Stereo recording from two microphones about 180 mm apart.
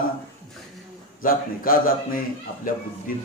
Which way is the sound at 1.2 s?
50° left (ahead or behind).